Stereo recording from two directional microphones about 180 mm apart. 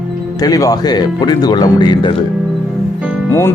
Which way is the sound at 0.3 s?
20° left (ahead or behind).